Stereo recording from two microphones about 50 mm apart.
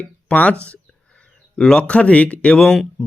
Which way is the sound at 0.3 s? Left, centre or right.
Left.